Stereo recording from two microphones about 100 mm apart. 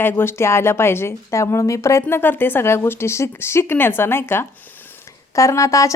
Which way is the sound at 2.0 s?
20° left (ahead or behind).